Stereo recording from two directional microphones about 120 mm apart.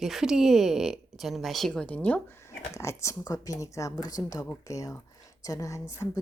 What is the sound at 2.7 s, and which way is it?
A woman's voice, 25° left (ahead or behind).